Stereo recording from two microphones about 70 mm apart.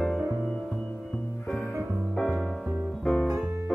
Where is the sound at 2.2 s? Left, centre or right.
Centre.